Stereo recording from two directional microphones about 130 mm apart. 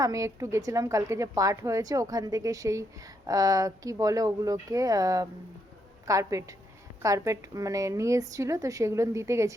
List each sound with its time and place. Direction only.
0.0 s a woman's voice: 25° right (ahead or behind)